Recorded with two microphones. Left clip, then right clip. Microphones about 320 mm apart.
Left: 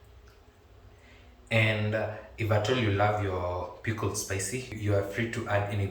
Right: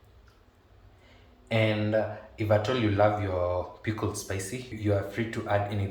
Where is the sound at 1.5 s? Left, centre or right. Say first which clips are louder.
Even; centre.